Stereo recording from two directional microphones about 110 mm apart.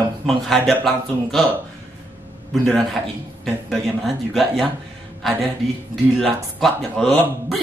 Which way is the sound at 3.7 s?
Centre (ahead or behind).